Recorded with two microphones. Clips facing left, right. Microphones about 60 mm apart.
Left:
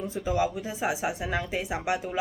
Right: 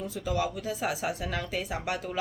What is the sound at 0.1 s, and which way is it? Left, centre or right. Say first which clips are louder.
A woman's voice: left 4 dB; left.